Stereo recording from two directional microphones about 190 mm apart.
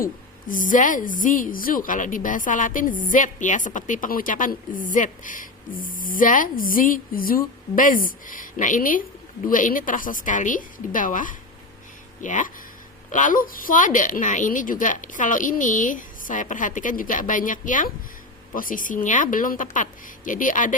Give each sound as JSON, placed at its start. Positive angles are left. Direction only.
{"t": 0.0, "sound": "a woman's voice", "side_deg": 45}